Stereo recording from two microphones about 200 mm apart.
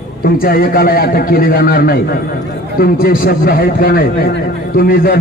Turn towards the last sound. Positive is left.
turn(degrees=50)  # may be behind; listen again after turning